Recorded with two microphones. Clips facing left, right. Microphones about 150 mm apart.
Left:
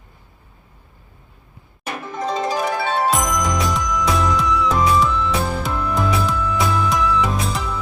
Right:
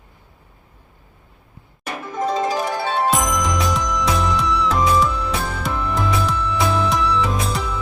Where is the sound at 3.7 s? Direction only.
Centre (ahead or behind).